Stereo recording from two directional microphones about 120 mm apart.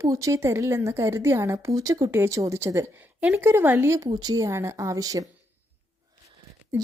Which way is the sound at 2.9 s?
15° right (ahead or behind).